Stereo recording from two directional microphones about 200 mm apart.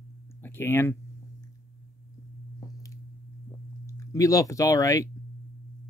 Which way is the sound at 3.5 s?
15° left (ahead or behind).